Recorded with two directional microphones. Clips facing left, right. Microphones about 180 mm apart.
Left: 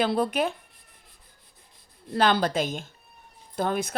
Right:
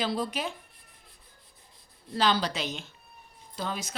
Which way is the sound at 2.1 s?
55° left (ahead or behind).